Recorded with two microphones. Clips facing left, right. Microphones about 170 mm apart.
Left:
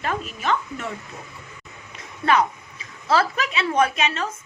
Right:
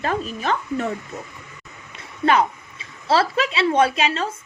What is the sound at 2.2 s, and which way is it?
Speech, 30° right (ahead or behind).